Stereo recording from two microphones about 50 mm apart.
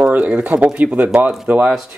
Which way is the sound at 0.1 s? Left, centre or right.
Right.